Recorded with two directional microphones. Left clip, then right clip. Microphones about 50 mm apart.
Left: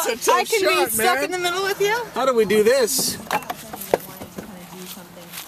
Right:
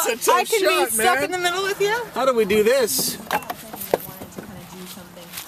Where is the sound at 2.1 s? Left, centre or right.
Centre.